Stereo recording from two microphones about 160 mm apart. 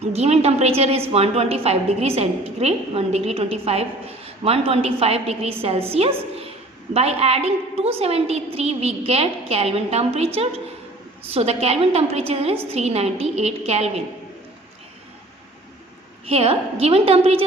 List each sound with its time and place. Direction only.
0.0 s a woman's voice: 40° right (ahead or behind)
16.2 s a woman's voice: 40° right (ahead or behind)